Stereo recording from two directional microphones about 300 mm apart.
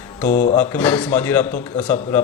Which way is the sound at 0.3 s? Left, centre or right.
Left.